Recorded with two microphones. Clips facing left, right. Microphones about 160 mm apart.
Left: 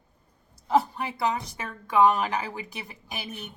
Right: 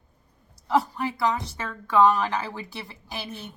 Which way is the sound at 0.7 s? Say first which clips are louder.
Even; 25° left (ahead or behind).